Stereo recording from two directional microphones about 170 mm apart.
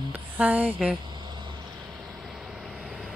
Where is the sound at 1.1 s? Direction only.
30° right (ahead or behind).